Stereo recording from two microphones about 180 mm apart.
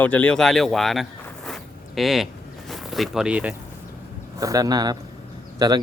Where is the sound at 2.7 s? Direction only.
Centre (ahead or behind).